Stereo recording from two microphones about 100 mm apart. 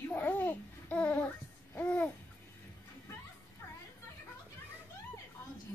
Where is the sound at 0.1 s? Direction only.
15° left (ahead or behind).